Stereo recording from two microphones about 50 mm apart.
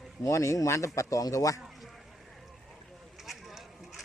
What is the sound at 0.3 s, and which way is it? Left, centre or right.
A man's voice, left.